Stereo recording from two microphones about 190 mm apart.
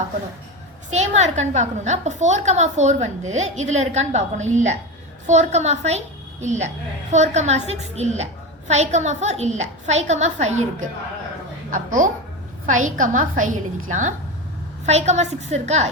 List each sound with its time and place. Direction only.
0.9 s a woman's voice: 35° right (ahead or behind)
11.7 s a child's voice: 45° right (ahead or behind)